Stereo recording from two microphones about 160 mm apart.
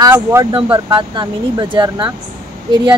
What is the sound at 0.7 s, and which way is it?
Speech, 25° right (ahead or behind).